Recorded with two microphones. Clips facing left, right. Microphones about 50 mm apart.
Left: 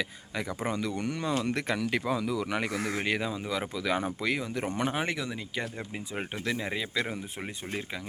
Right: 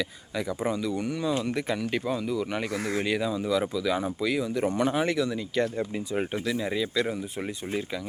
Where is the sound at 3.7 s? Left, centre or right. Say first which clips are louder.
Right 3 dB; left; by 6.2 s centre.